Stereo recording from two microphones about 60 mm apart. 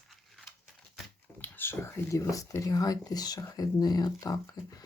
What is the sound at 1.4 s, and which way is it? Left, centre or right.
Speech, left.